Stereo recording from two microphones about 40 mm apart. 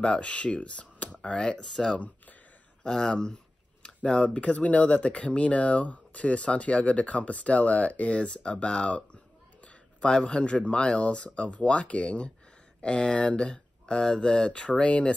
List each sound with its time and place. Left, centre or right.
0.0 s speech: left
2.8 s speech: centre
4.4 s speech: left